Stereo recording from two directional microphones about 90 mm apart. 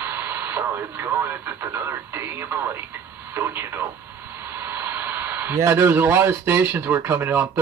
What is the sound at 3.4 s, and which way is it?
Speech, 30° right (ahead or behind).